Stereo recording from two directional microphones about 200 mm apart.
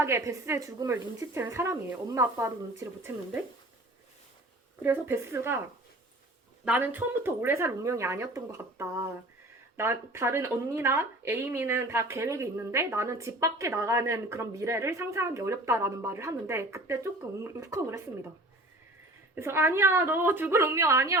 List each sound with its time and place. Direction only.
0.0 s speech: 15° right (ahead or behind)
4.8 s speech: 10° right (ahead or behind)
6.7 s speech: 10° right (ahead or behind)
19.4 s speech: 10° right (ahead or behind)